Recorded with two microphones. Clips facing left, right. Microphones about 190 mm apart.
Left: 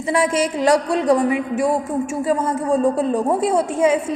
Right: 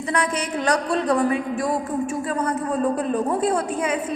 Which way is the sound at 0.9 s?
25° left (ahead or behind).